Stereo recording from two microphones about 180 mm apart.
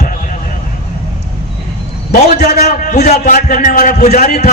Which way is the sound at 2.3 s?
40° left (ahead or behind).